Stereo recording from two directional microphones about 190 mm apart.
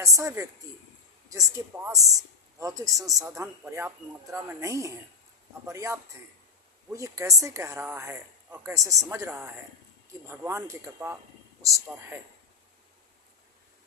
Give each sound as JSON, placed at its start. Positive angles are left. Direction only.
{"t": 0.0, "sound": "speech", "side_deg": -15}